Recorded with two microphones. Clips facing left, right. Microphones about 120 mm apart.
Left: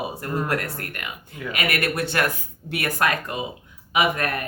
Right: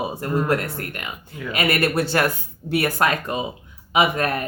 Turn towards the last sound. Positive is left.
turn(degrees=-25)  # may be behind; listen again after turning